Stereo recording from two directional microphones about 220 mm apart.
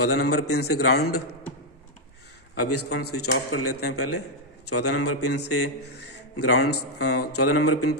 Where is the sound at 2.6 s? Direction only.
90° left.